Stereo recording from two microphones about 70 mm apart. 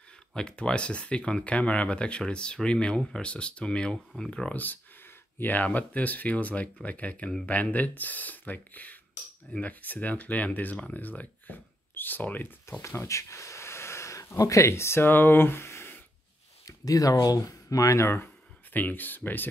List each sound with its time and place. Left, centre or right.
0.3 s speech: centre
5.4 s speech: left
12.8 s speech: left
16.6 s speech: left